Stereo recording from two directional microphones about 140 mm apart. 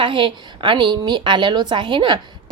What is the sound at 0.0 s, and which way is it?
A woman's voice, 35° right (ahead or behind).